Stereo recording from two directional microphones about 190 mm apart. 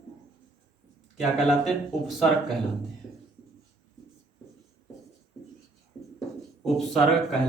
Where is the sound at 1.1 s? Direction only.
Centre (ahead or behind).